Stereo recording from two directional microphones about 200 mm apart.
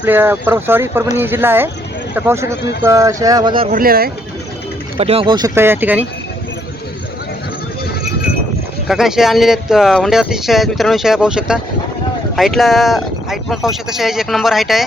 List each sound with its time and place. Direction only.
0.0 s speech: 10° right (ahead or behind)
3.7 s speech: 45° right (ahead or behind)
4.9 s speech: 30° right (ahead or behind)
5.5 s speech: 10° right (ahead or behind)
8.9 s speech: centre (ahead or behind)